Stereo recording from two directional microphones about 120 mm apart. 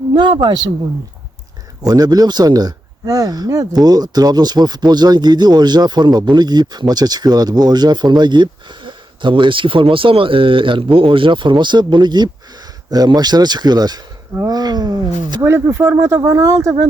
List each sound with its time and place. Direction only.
0.1 s speech: 40° right (ahead or behind)
1.8 s speech: 30° right (ahead or behind)
15.4 s speech: 20° right (ahead or behind)